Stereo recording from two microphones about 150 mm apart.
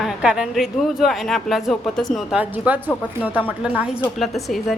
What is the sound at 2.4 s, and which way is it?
A woman's voice, 10° right (ahead or behind).